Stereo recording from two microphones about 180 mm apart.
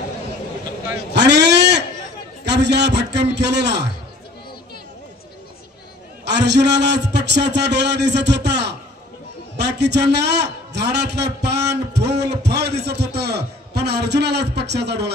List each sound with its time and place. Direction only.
1.1 s a sound: 70° right (ahead or behind)
2.4 s a man's voice: 70° right (ahead or behind)
6.2 s a man's voice: 70° right (ahead or behind)